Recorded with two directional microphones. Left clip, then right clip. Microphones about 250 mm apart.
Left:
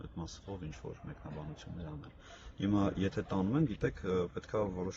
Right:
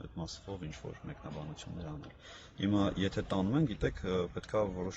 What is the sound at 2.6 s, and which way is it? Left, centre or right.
Speech, centre.